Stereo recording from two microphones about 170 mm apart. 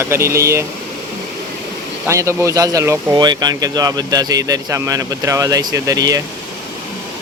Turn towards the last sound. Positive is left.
turn(degrees=-20)  # may be behind; listen again after turning